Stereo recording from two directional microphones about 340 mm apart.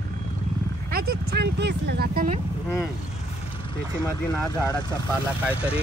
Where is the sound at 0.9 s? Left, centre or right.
Right.